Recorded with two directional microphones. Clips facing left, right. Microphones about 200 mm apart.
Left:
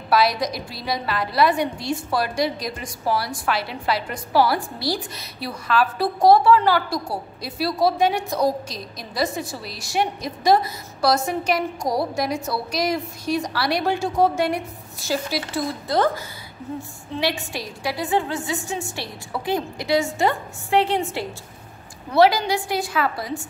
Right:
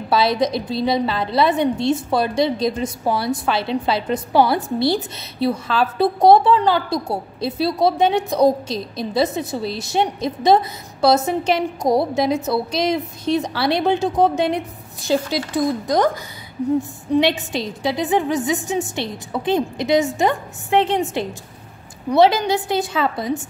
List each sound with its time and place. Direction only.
0.1 s a woman's voice: 25° right (ahead or behind)
17.1 s a woman's voice: 20° right (ahead or behind)